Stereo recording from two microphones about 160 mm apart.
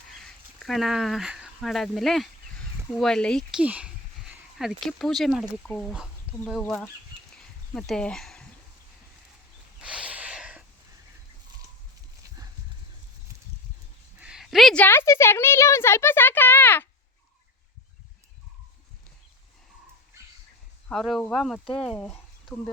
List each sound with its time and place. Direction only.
0.3 s speech: centre (ahead or behind)
3.6 s speech: 10° right (ahead or behind); by 6.9 s 10° left (ahead or behind)
7.3 s a sound: 5° left (ahead or behind)
9.8 s a sound: 5° right (ahead or behind)
14.2 s a woman's voice: 5° right (ahead or behind); by 16.9 s 15° left (ahead or behind)
20.9 s speech: centre (ahead or behind)